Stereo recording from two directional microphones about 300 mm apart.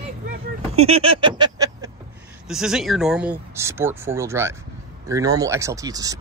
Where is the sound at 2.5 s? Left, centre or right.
Centre.